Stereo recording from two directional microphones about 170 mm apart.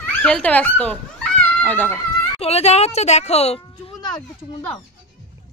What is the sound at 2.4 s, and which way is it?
A child's voice, 40° left (ahead or behind).